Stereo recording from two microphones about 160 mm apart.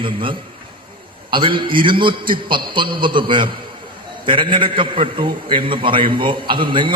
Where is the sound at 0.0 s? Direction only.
30° right (ahead or behind).